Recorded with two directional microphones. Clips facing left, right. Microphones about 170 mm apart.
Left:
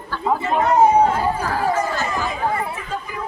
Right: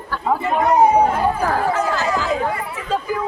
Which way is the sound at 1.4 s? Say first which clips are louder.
Right 2 dB; 55° right (ahead or behind).